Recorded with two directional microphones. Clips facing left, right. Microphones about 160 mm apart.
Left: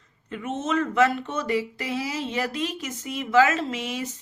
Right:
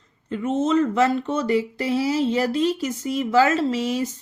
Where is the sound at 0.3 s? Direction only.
30° right (ahead or behind).